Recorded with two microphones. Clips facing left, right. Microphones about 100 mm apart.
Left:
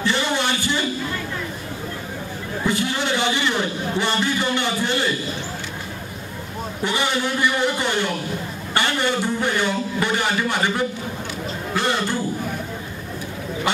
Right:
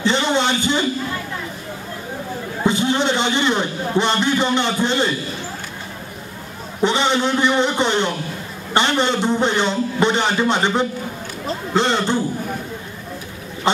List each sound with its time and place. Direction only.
0.0 s a sound: 20° right (ahead or behind)
2.6 s a man's voice: 20° right (ahead or behind)
6.8 s a man's voice: 20° right (ahead or behind)